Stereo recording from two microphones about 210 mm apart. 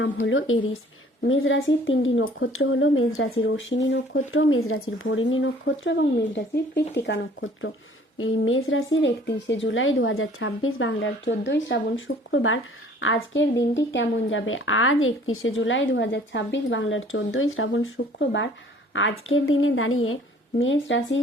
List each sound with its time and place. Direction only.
0.0 s speech: 65° left (ahead or behind)
8.2 s a woman's voice: 70° left (ahead or behind)